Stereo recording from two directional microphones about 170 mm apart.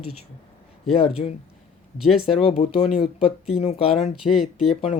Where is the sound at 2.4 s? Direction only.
35° left (ahead or behind).